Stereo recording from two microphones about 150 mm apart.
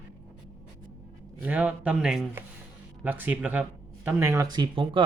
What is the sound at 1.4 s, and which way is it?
Speech, 10° right (ahead or behind).